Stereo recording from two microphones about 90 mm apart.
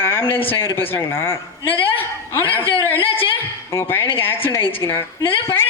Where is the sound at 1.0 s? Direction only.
25° left (ahead or behind).